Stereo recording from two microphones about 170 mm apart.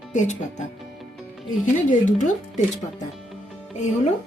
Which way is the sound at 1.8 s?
45° left (ahead or behind).